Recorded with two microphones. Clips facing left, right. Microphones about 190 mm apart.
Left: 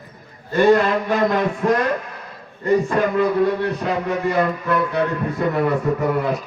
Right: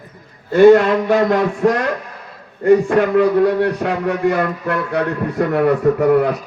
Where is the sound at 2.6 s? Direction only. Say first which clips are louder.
Right 5 dB; 70° right (ahead or behind).